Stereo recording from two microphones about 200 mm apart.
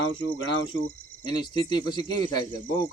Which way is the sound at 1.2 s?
20° left (ahead or behind).